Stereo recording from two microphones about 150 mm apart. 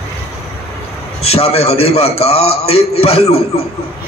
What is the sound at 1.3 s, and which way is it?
A man's voice, 40° left (ahead or behind).